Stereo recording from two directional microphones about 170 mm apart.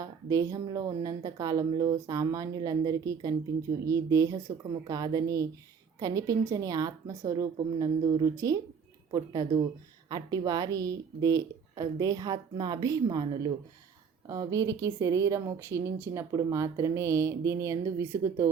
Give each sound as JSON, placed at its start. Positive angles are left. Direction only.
{"t": 0.0, "sound": "a woman's voice", "side_deg": -20}